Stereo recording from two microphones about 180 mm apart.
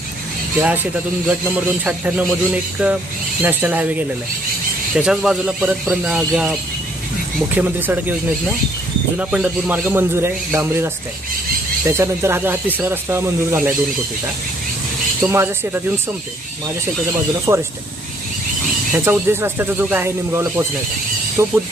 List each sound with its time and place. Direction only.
1.3 s speech: 10° right (ahead or behind)
9.1 s speech: 10° right (ahead or behind)
15.2 s speech: 15° right (ahead or behind)
17.5 s speech: 15° right (ahead or behind)
18.9 s speech: 15° right (ahead or behind)